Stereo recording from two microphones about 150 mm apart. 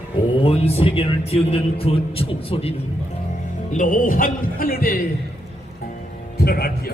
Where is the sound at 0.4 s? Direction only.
40° left (ahead or behind).